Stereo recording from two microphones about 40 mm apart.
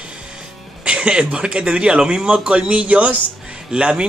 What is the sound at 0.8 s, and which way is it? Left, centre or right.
A man's voice, right.